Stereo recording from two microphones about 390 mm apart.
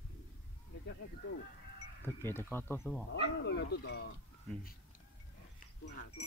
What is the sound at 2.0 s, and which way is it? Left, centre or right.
Speech, centre.